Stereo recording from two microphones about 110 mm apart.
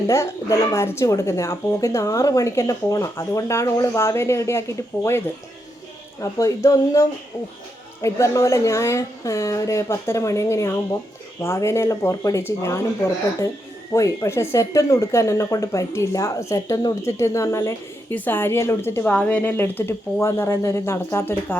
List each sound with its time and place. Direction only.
0.1 s speech: 25° left (ahead or behind)
6.4 s speech: 30° left (ahead or behind)
13.9 s speech: 30° left (ahead or behind)
19.0 s speech: 10° left (ahead or behind)